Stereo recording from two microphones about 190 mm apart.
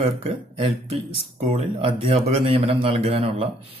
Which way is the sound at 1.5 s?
30° right (ahead or behind).